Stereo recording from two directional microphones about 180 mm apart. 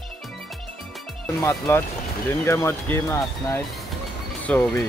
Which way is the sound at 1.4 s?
15° left (ahead or behind).